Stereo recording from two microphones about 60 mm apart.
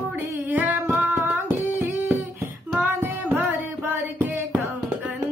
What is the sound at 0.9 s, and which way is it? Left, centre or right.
Music, right.